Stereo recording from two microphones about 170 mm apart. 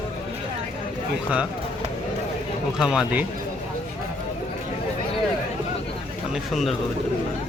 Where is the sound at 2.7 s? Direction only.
5° right (ahead or behind).